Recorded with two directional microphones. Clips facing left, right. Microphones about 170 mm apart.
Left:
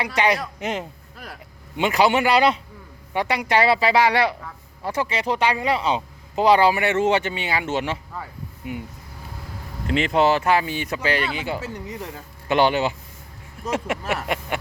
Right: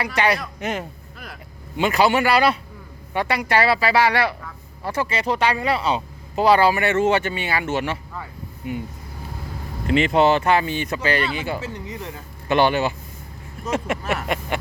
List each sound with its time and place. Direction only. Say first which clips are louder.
0.0 s speech: even; 15° left (ahead or behind)
1.7 s speech: even; 15° left (ahead or behind)
9.8 s speech: right 2 dB; centre (ahead or behind); by 11.6 s 15° left (ahead or behind)
11.6 s speech: even; 40° left (ahead or behind)
12.5 s speech: right 1 dB; 15° left (ahead or behind)